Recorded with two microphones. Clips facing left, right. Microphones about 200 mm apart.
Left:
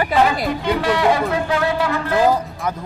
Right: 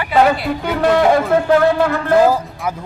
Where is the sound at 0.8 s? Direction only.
50° right (ahead or behind).